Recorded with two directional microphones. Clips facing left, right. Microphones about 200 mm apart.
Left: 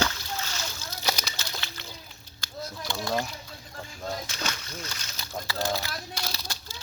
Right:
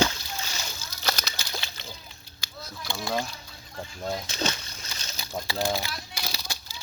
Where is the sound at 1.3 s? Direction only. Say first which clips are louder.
Right 1 dB; 15° right (ahead or behind).